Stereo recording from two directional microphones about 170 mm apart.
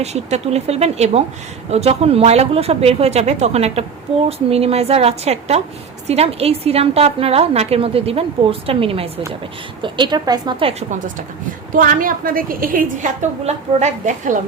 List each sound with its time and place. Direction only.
0.0 s a woman's voice: 40° right (ahead or behind)
11.7 s a woman's voice: 55° right (ahead or behind)
13.4 s a woman's voice: 40° right (ahead or behind)